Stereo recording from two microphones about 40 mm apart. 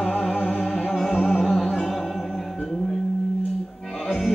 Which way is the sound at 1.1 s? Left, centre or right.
Left.